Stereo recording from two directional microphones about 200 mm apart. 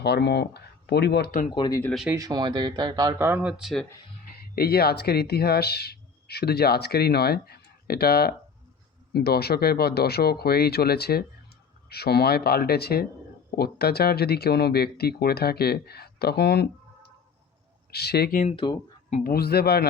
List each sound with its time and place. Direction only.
0.0 s speech: 55° left (ahead or behind)
1.5 s speech: 20° left (ahead or behind)
1.8 s speech: centre (ahead or behind)
2.1 s speech: 20° right (ahead or behind); by 3.8 s centre (ahead or behind)
4.3 s speech: 50° left (ahead or behind)
17.9 s speech: 55° left (ahead or behind)
18.4 s speech: 25° left (ahead or behind)
19.1 s speech: 50° left (ahead or behind)